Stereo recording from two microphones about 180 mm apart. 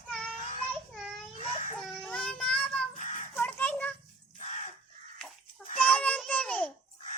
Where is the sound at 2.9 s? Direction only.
45° left (ahead or behind).